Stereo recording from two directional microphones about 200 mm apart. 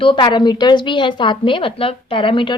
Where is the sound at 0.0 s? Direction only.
25° left (ahead or behind).